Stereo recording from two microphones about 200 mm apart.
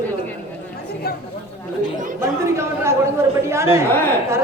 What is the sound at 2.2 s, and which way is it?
A woman's voice, 15° right (ahead or behind).